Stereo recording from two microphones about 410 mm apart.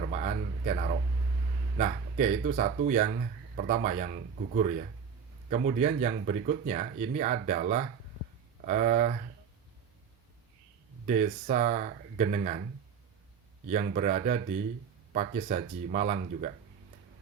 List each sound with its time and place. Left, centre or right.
0.0 s a sound: centre
1.8 s speech: centre
11.0 s speech: centre
13.7 s speech: centre